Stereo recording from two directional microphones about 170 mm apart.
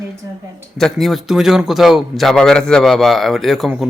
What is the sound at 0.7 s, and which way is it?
A man's voice, centre (ahead or behind).